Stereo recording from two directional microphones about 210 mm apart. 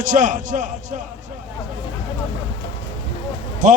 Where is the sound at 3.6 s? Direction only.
40° right (ahead or behind).